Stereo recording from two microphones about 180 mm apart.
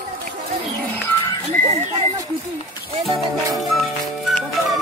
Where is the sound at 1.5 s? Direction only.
40° right (ahead or behind).